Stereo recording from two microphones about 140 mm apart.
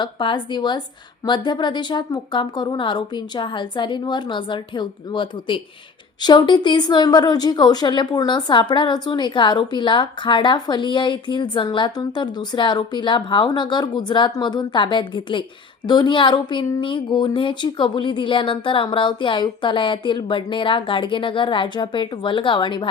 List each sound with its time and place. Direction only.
0.0 s a woman's voice: 35° left (ahead or behind)